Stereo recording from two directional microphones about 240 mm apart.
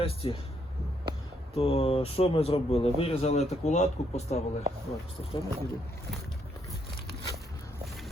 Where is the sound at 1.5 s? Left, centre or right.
Left.